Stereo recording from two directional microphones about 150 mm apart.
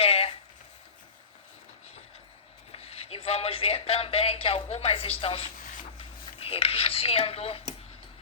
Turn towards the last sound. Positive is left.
turn(degrees=40)  # may be behind; listen again after turning